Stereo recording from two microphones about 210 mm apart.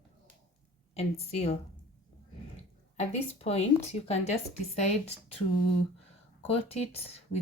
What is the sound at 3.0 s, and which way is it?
A woman's voice, 30° left (ahead or behind).